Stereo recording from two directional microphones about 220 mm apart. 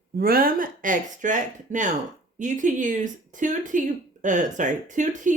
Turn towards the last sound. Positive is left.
turn(degrees=-35)  # may be behind; listen again after turning